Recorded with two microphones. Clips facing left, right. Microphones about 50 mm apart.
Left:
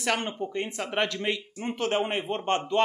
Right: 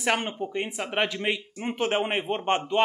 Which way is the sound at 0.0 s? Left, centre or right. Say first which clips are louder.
Right 2 dB; centre.